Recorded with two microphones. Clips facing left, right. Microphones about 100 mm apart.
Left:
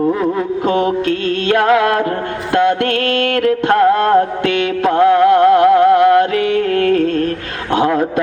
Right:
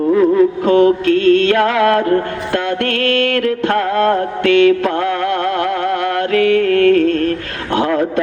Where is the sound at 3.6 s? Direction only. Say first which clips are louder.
Left 4 dB; 20° left (ahead or behind).